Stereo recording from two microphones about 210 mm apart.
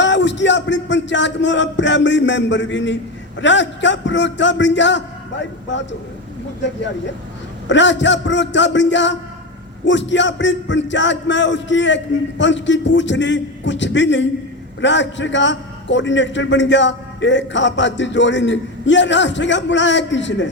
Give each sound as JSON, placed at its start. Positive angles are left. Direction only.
{"t": 0.0, "sound": "a man's voice", "side_deg": 60}
{"t": 7.7, "sound": "a man's voice", "side_deg": 60}